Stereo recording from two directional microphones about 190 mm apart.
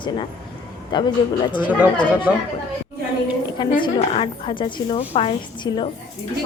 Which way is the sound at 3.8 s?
25° left (ahead or behind).